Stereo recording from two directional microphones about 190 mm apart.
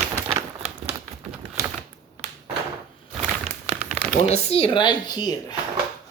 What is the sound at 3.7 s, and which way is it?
Crumpling, 35° right (ahead or behind).